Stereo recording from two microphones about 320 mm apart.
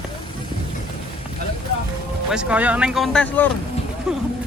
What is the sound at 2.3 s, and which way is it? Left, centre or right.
Speech, centre.